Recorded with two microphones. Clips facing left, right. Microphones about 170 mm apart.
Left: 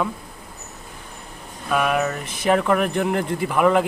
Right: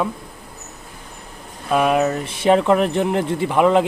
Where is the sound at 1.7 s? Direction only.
30° right (ahead or behind).